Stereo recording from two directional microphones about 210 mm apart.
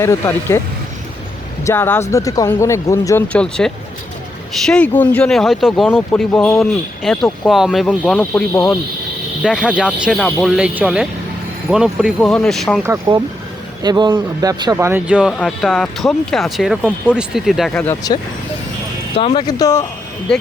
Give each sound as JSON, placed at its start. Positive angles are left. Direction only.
{"t": 0.0, "sound": "speech", "side_deg": 10}
{"t": 1.6, "sound": "speech", "side_deg": 10}
{"t": 9.4, "sound": "speech", "side_deg": -5}
{"t": 12.8, "sound": "speech", "side_deg": -15}
{"t": 19.1, "sound": "speech", "side_deg": 25}
{"t": 20.3, "sound": "speech", "side_deg": 5}